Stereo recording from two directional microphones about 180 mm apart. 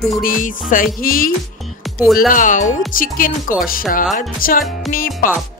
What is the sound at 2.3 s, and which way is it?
Speech, 45° left (ahead or behind).